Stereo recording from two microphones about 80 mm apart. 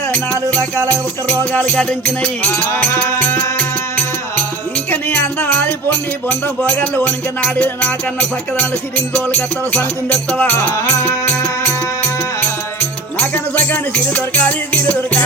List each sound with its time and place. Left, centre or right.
0.1 s music: left
2.5 s music: left
3.0 s music: left
10.6 s music: left